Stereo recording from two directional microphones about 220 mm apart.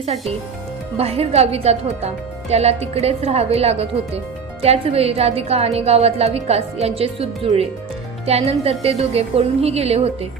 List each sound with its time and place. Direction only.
0.0 s a woman's voice: 30° right (ahead or behind)